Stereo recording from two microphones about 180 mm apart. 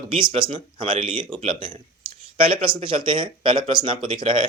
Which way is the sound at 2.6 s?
30° right (ahead or behind).